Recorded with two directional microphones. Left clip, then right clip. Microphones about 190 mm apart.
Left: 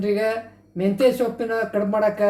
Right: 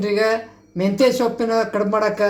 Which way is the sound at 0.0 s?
30° right (ahead or behind).